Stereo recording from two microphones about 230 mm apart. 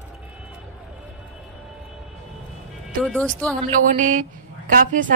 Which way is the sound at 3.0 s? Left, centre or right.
Centre.